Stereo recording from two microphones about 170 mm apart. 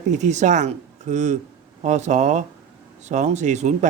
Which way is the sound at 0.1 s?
45° right (ahead or behind).